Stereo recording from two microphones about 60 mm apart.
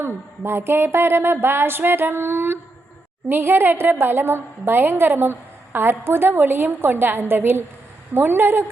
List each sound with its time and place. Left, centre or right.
0.0 s a woman's voice: right